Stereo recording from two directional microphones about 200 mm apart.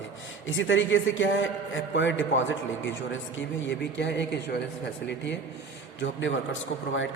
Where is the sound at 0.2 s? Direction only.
70° left (ahead or behind).